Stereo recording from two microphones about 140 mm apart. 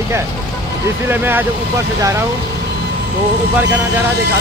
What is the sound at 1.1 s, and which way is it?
Speech, 15° right (ahead or behind).